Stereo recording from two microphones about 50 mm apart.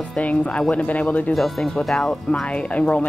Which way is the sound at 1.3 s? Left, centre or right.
Centre.